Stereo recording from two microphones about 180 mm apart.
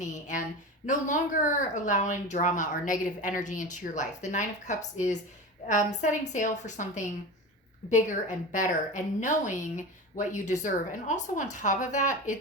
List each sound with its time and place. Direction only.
0.0 s a woman's voice: 45° left (ahead or behind)